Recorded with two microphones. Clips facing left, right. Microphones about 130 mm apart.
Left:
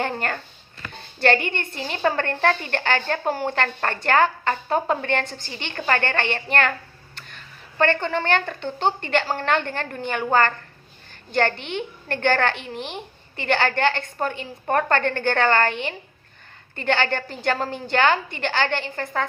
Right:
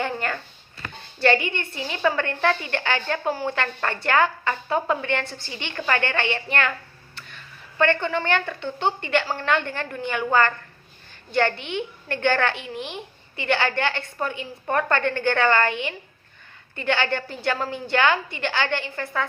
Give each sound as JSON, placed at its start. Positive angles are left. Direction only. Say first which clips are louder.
{"t": 0.0, "sound": "a sound", "louder": "left 1 dB", "side_deg": 50}
{"t": 1.2, "sound": "a woman's voice", "louder": "even", "side_deg": 50}
{"t": 11.7, "sound": "a woman's voice", "louder": "even", "side_deg": 45}